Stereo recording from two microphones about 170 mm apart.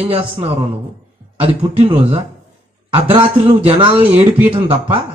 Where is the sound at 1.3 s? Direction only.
30° right (ahead or behind).